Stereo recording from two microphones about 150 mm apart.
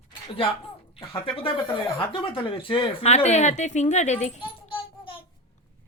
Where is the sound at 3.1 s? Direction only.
50° left (ahead or behind).